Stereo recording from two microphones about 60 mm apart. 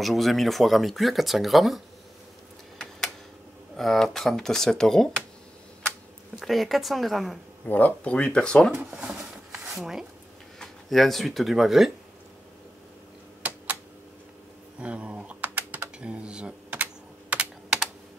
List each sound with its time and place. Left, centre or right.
0.0 s speech: centre
3.7 s speech: centre
6.4 s speech: centre
7.6 s speech: left
8.9 s a sound: centre
9.8 s speech: centre
14.8 s typing: right
16.0 s speech: centre
16.7 s computer keyboard: right